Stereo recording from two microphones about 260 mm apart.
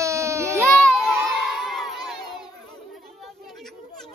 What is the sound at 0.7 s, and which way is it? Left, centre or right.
Crowd, centre.